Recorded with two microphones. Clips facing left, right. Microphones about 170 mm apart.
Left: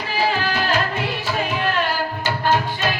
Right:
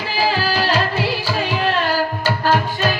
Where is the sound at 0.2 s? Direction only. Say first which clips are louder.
Right 2 dB; 30° right (ahead or behind).